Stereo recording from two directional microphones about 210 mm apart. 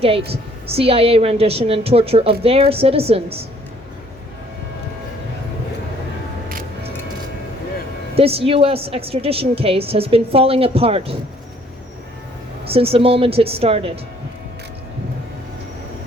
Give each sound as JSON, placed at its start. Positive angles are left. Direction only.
{"t": 0.0, "sound": "a woman's voice", "side_deg": -25}
{"t": 6.5, "sound": "music", "side_deg": -40}
{"t": 8.1, "sound": "a woman's voice", "side_deg": -25}
{"t": 12.6, "sound": "a woman's voice", "side_deg": -25}